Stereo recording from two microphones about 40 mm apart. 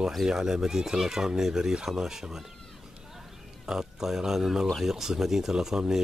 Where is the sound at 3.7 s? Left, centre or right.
Centre.